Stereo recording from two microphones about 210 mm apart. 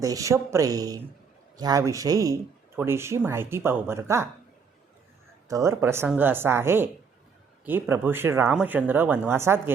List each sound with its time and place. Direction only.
0.0 s speech: 15° right (ahead or behind)
5.5 s speech: 15° right (ahead or behind)